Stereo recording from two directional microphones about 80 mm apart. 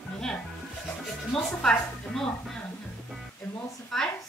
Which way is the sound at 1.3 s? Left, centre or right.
Centre.